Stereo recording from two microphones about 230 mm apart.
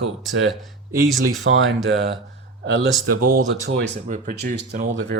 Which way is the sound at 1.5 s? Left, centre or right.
Right.